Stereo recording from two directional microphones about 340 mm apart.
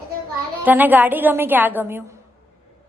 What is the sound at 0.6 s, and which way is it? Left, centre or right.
A woman's voice, centre.